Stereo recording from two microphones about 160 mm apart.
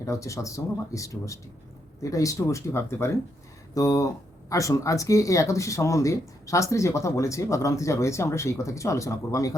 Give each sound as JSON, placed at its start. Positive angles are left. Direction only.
{"t": 0.0, "sound": "speech", "side_deg": 20}